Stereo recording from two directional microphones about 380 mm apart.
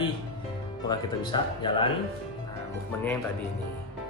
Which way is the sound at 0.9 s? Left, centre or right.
Centre.